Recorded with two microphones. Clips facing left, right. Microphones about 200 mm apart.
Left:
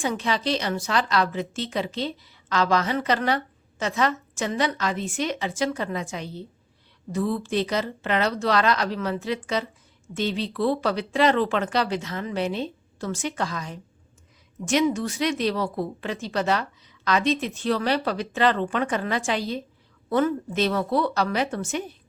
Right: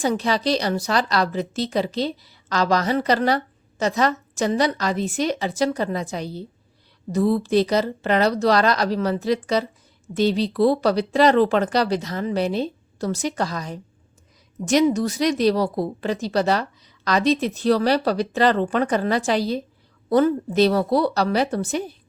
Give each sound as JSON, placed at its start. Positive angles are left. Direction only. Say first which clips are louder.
{"t": 0.0, "sound": "a woman's voice", "louder": "right 4 dB", "side_deg": -35}